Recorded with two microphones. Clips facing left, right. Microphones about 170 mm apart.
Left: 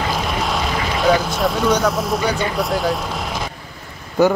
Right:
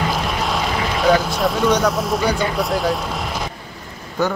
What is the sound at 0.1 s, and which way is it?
Speech, centre (ahead or behind).